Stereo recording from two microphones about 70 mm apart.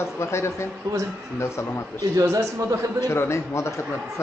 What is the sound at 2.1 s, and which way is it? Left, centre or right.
Speech, right.